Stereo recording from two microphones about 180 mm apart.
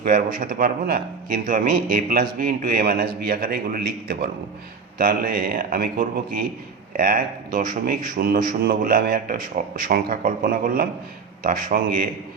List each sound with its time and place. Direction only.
0.3 s a man's voice: 55° right (ahead or behind)